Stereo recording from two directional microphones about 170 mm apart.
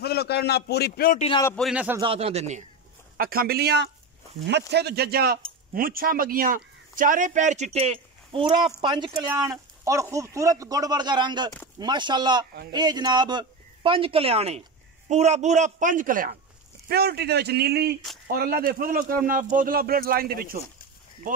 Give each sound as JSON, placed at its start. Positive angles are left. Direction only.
{"t": 0.0, "sound": "a man's voice", "side_deg": 70}
{"t": 1.6, "sound": "a man's voice", "side_deg": -5}
{"t": 2.0, "sound": "speech", "side_deg": -35}
{"t": 3.2, "sound": "a man's voice", "side_deg": -60}
{"t": 16.8, "sound": "speech", "side_deg": -70}